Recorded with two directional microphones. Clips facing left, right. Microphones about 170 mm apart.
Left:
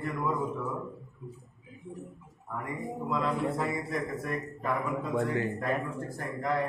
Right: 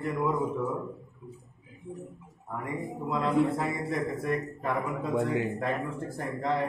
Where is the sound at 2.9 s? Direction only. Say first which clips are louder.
Right 5 dB; 20° right (ahead or behind).